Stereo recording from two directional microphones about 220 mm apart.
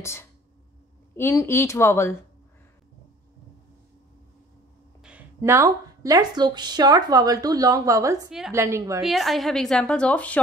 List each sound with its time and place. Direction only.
0.0 s speech: 10° left (ahead or behind)
5.0 s a woman's voice: 10° right (ahead or behind)
8.3 s a woman's voice: centre (ahead or behind)
8.5 s a woman's voice: 15° right (ahead or behind)
9.0 s a woman's voice: centre (ahead or behind)